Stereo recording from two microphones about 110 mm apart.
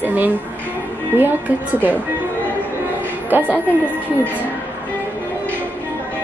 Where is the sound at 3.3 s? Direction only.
15° right (ahead or behind).